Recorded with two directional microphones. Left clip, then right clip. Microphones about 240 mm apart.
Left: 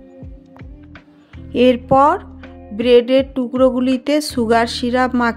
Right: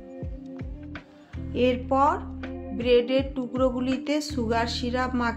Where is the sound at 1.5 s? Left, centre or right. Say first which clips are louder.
Left 11 dB; left.